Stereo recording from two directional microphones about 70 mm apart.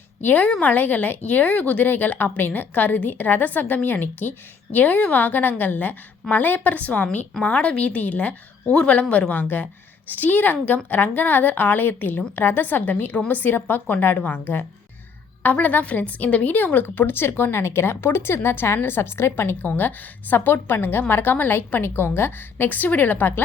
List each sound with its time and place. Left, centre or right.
0.2 s a woman's voice: left